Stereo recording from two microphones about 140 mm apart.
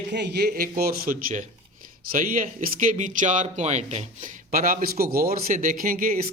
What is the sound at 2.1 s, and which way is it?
Speech, 80° right.